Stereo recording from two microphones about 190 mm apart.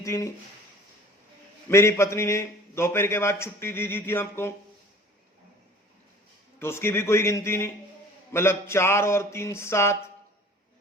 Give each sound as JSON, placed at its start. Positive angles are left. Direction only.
{"t": 0.0, "sound": "speech", "side_deg": 15}
{"t": 1.7, "sound": "a man's voice", "side_deg": 15}
{"t": 6.6, "sound": "a man's voice", "side_deg": 15}